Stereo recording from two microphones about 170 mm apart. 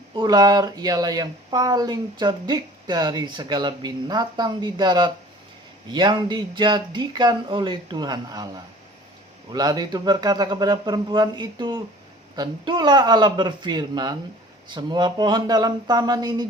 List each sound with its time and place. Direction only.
0.2 s speech: 25° right (ahead or behind)